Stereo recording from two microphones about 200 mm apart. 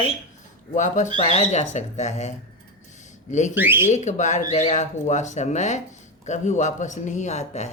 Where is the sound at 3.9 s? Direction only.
35° left (ahead or behind).